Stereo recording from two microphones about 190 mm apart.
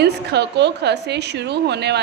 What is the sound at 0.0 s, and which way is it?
A woman's voice, 60° right (ahead or behind).